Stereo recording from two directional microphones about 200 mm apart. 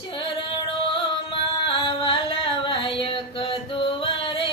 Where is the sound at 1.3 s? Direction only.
25° left (ahead or behind).